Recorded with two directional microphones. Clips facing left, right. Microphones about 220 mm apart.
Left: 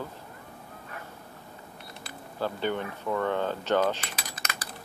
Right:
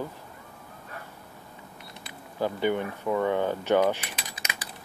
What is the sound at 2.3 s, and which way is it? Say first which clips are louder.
Speech: right 3 dB; 15° right (ahead or behind).